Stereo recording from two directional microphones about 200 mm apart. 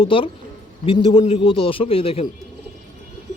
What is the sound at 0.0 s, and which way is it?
Speech, 25° left (ahead or behind).